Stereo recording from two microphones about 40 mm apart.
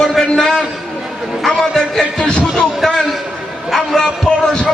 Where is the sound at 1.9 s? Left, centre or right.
Centre.